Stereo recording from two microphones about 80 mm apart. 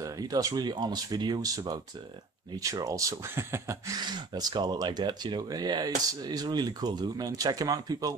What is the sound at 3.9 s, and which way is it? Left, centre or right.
Speech, right.